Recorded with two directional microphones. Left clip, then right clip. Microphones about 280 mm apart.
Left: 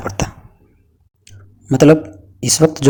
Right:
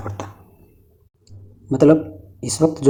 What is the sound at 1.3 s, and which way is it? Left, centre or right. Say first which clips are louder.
Clicking: left 5 dB; left.